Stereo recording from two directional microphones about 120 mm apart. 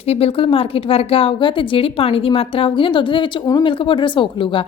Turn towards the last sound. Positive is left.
turn(degrees=45)  # may be behind; listen again after turning